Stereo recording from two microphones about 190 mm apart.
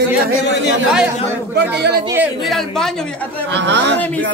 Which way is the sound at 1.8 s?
60° right (ahead or behind).